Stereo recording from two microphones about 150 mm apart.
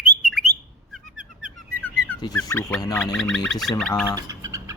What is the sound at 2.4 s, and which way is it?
Speech, 20° left (ahead or behind).